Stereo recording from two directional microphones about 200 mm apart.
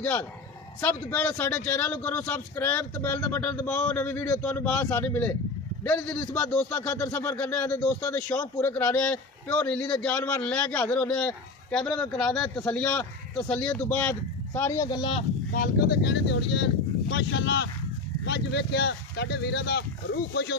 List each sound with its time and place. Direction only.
0.0 s speech: 10° left (ahead or behind)
15.5 s speech: 45° left (ahead or behind)